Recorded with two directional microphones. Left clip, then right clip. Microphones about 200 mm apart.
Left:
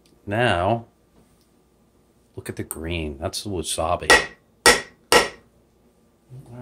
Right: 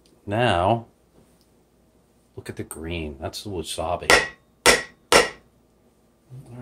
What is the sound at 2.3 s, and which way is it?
Speech, 30° left (ahead or behind).